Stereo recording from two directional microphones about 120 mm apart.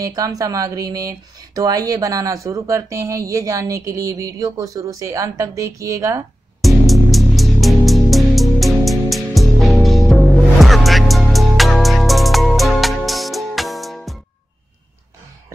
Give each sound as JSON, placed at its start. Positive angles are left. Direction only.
{"t": 0.0, "sound": "speech", "side_deg": -30}
{"t": 6.6, "sound": "music", "side_deg": 0}